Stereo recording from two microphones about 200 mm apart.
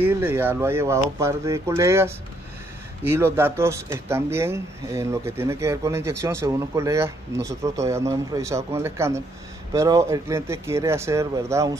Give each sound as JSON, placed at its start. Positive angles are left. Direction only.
{"t": 0.0, "sound": "speech", "side_deg": -10}